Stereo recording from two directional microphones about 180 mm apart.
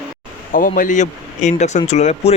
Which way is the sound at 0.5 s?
50° left (ahead or behind).